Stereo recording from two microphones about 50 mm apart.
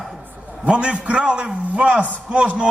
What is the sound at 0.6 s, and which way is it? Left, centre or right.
A man's voice, right.